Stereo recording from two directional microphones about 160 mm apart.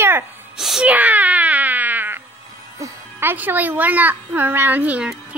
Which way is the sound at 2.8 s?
15° right (ahead or behind).